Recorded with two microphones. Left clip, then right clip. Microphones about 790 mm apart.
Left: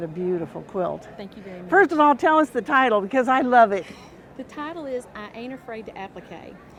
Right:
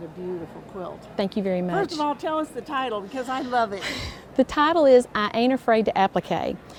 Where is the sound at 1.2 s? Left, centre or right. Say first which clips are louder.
Right 12 dB; right.